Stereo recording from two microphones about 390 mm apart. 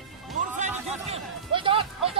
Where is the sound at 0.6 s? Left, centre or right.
Centre.